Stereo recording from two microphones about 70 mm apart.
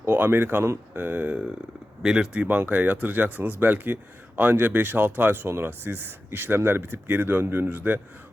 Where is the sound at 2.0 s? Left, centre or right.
Centre.